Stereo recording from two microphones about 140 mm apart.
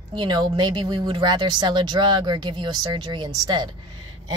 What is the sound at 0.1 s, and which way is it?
A woman's voice, 30° right (ahead or behind).